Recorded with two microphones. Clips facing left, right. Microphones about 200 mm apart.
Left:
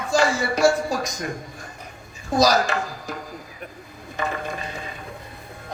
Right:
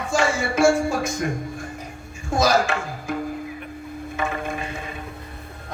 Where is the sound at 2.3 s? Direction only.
35° left (ahead or behind).